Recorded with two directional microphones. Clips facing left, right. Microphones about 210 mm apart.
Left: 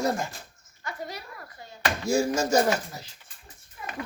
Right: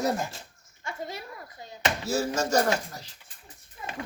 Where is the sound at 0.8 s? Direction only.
25° right (ahead or behind).